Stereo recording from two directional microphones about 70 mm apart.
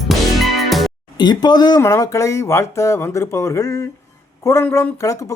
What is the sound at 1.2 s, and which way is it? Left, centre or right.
Speech, left.